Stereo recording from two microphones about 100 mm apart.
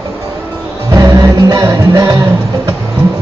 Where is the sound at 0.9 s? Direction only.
35° right (ahead or behind).